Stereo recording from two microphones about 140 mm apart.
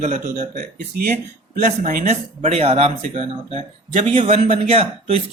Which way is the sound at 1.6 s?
80° right.